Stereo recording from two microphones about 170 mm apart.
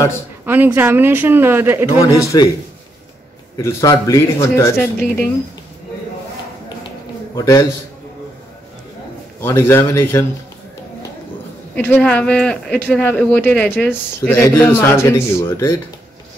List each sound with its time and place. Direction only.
0.5 s speech: 10° right (ahead or behind)
2.2 s a man's voice: 25° left (ahead or behind)
3.5 s speech: 20° left (ahead or behind)
7.3 s a man's voice: 20° left (ahead or behind)
9.4 s speech: 15° left (ahead or behind)
11.7 s speech: 10° left (ahead or behind)